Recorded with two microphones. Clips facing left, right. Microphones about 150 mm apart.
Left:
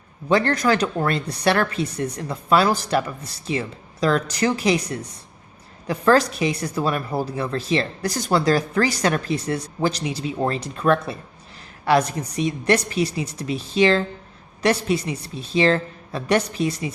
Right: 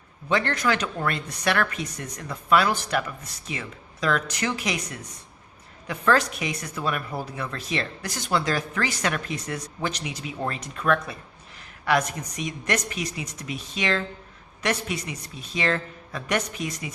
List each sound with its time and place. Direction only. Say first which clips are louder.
0.3 s speech: left 5 dB; 35° left (ahead or behind)